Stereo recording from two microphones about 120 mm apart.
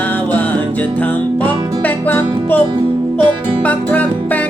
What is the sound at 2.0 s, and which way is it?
Music, 15° left (ahead or behind).